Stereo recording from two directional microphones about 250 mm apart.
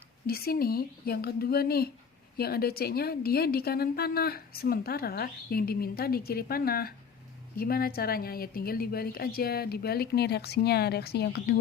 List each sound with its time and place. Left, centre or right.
0.3 s a woman's voice: left